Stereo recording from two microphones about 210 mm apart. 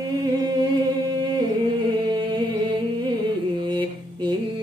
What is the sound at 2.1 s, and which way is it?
Music, 20° right (ahead or behind).